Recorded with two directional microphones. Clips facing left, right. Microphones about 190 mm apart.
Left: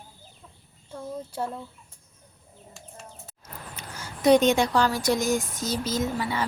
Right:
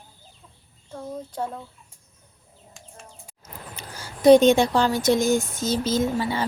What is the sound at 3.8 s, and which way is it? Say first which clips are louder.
Speech: right 5 dB; 30° right (ahead or behind).